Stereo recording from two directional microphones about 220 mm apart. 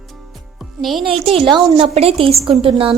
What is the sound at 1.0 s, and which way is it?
A woman's voice, 25° right (ahead or behind).